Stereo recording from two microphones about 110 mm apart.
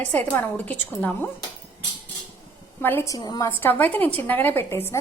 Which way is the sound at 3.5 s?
20° left (ahead or behind).